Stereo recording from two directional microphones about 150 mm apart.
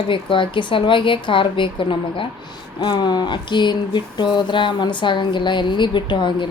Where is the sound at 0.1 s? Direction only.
35° left (ahead or behind).